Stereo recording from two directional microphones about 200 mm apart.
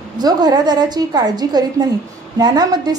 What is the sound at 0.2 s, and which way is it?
A woman's voice, 20° right (ahead or behind).